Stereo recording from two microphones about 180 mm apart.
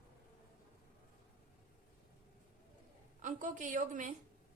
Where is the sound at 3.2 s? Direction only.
45° right (ahead or behind).